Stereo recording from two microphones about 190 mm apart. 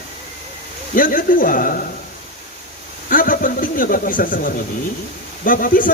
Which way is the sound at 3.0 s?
45° left (ahead or behind).